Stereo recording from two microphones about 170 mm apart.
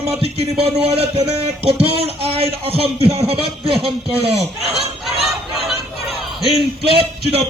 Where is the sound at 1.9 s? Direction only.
35° right (ahead or behind).